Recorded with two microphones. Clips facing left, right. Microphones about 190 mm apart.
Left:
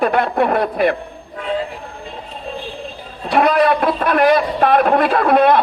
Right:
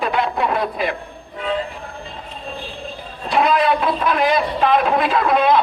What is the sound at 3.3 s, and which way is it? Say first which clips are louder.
Speech: left 3 dB; 55° left (ahead or behind).